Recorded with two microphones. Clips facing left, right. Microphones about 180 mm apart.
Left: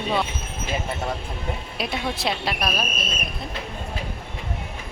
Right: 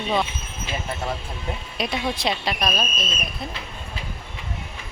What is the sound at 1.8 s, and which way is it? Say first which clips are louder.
Speech: right 2 dB; 5° left (ahead or behind).